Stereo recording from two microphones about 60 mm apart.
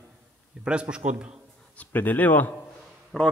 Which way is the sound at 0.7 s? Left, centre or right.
Centre.